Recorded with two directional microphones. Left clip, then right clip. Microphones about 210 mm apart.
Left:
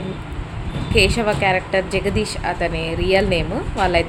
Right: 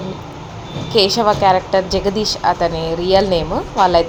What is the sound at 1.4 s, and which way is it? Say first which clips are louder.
Speech: right 5 dB; 15° left (ahead or behind).